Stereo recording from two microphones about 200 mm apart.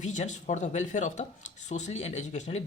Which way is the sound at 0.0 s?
35° left (ahead or behind).